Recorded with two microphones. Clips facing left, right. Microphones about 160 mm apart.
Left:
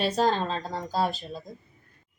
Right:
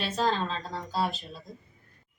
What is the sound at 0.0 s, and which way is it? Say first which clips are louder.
Speech: left 4 dB; 40° left (ahead or behind).